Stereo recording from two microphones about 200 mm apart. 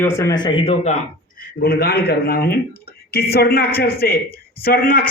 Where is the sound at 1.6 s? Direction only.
50° left (ahead or behind).